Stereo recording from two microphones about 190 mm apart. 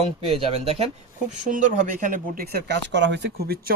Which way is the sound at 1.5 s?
40° right (ahead or behind).